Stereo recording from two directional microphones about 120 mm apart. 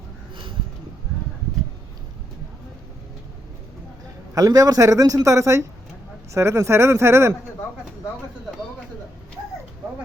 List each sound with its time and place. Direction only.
4.4 s a man's voice: 30° right (ahead or behind)